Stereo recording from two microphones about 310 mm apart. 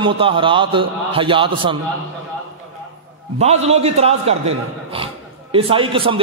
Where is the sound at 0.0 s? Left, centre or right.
Centre.